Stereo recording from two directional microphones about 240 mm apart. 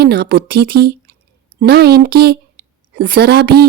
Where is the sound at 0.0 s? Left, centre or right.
Right.